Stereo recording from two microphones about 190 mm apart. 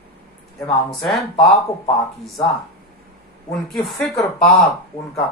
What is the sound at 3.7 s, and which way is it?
Speech, centre (ahead or behind).